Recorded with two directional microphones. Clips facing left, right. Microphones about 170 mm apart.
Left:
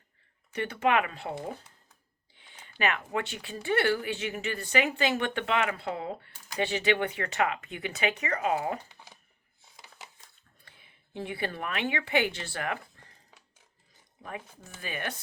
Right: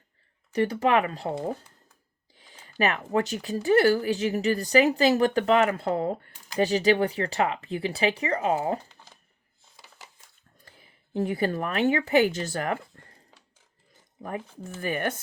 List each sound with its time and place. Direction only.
0.5 s speech: 35° right (ahead or behind)
2.3 s speech: 40° right (ahead or behind)
8.9 s a sound: 15° left (ahead or behind)
9.6 s crushing: 15° left (ahead or behind)
10.7 s speech: 40° right (ahead or behind)
14.2 s speech: 50° right (ahead or behind)